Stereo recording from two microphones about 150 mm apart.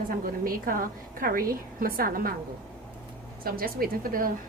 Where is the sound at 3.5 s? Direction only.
80° right.